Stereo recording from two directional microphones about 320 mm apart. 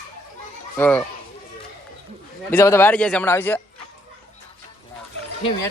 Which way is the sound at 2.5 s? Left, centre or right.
Centre.